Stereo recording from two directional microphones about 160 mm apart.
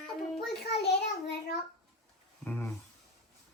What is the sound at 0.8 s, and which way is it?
Child singing, 90° left.